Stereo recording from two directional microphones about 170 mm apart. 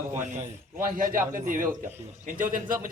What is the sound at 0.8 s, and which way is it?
A man's voice, 55° right (ahead or behind).